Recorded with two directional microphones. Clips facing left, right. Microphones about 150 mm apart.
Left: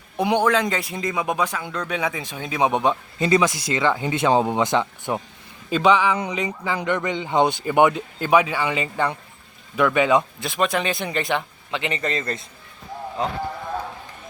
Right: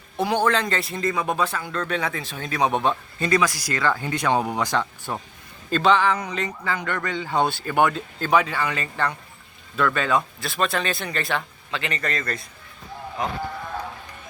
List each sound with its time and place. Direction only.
0.2 s speech: 15° left (ahead or behind)